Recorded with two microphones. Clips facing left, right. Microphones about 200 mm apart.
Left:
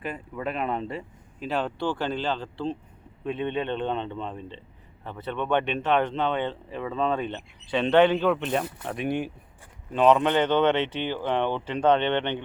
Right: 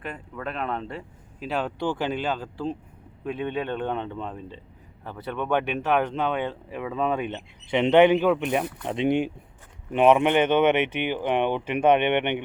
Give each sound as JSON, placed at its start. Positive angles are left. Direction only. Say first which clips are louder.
{"t": 0.0, "sound": "speech", "louder": "left 2 dB", "side_deg": 5}